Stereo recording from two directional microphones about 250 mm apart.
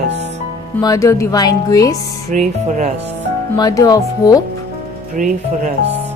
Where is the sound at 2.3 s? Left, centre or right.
Right.